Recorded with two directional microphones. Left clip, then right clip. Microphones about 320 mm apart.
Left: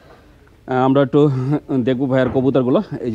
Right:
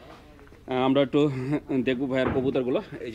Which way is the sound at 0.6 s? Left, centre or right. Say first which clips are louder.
Left 8 dB; left.